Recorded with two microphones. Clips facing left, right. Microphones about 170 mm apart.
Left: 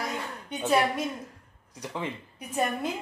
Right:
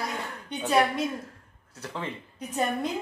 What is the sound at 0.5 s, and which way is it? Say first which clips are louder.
Speech: left 3 dB; 5° left (ahead or behind).